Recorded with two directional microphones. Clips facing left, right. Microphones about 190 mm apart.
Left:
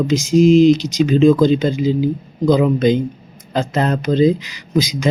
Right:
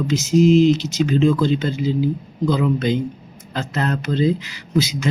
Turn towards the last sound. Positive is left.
turn(degrees=15)  # may be behind; listen again after turning